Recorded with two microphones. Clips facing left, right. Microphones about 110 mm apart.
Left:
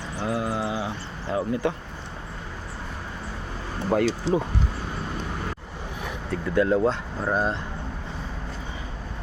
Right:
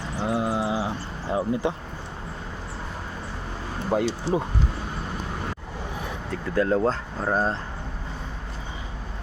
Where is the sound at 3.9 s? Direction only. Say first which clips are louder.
Left 1 dB; 20° right (ahead or behind).